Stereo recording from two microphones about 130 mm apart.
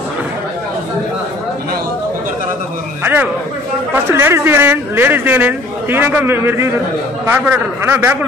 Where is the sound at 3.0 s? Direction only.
15° right (ahead or behind).